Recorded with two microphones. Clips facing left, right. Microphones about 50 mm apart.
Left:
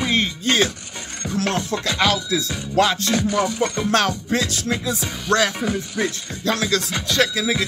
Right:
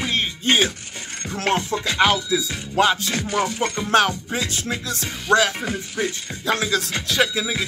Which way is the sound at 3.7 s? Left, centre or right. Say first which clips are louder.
Right 5 dB; centre.